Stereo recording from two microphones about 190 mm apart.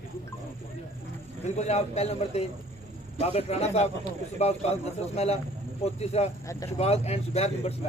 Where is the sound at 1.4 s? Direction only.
35° left (ahead or behind).